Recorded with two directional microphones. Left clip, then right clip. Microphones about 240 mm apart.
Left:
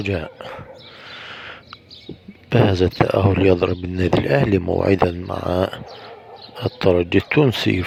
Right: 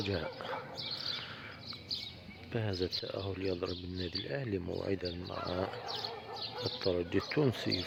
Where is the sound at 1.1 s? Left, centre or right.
Left.